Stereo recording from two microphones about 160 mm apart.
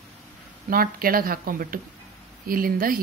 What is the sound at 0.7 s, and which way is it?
A woman's voice, 65° right (ahead or behind).